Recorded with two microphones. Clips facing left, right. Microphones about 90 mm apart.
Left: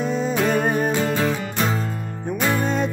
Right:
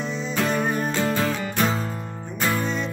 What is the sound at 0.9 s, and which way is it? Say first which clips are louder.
Music: left 2 dB; 15° left (ahead or behind).